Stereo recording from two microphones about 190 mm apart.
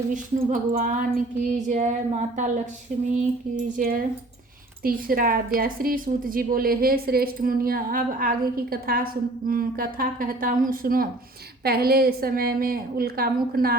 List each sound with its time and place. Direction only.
0.1 s a woman's voice: 45° right (ahead or behind)